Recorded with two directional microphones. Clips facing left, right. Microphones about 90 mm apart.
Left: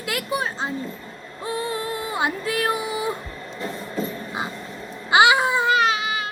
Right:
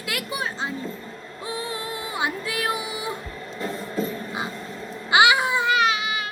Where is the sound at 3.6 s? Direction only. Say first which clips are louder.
Right 1 dB; 35° right (ahead or behind).